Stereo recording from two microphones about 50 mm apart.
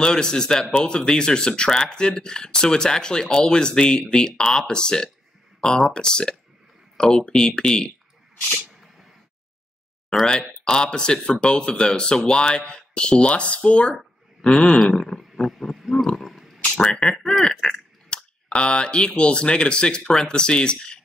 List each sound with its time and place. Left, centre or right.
0.0 s speech: centre
10.6 s speech: centre
14.8 s a sound: centre
16.7 s speech: centre